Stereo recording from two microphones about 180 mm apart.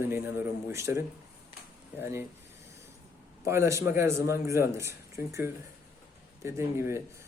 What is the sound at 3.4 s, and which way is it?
Speech, 15° right (ahead or behind).